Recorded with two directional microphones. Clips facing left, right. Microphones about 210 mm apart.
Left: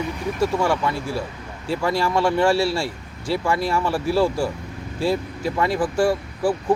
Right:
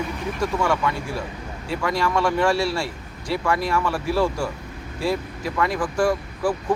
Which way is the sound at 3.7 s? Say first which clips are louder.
Left 2 dB; 30° left (ahead or behind).